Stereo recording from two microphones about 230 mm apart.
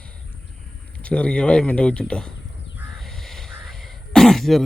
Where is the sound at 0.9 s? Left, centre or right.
Centre.